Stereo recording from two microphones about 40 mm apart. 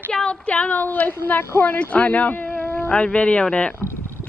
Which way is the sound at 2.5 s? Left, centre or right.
Left.